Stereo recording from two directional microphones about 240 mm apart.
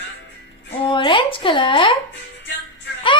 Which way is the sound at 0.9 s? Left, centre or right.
Left.